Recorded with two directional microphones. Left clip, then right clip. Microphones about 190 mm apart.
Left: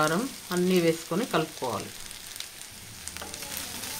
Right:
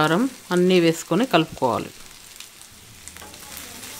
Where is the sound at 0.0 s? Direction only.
60° right (ahead or behind).